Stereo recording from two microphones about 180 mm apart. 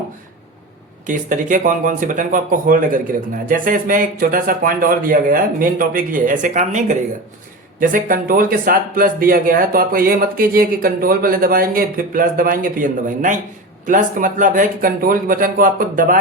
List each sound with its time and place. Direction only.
1.0 s speech: 45° right (ahead or behind)